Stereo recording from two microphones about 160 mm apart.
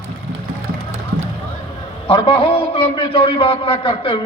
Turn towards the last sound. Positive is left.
turn(degrees=35)  # may be behind; listen again after turning